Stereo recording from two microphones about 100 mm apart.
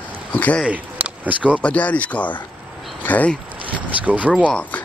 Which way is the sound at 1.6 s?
15° left (ahead or behind).